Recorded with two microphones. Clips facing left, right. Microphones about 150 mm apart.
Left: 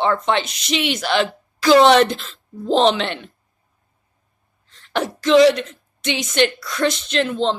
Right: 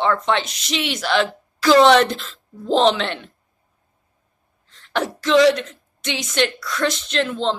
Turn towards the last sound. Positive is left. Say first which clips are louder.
# left 2 dB
turn(degrees=5)  # may be behind; listen again after turning